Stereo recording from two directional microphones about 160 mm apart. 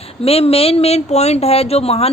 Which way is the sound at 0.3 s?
40° left (ahead or behind).